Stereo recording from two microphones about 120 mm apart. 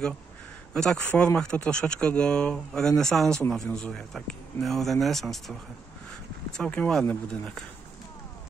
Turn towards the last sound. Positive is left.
turn(degrees=5)  # may be behind; listen again after turning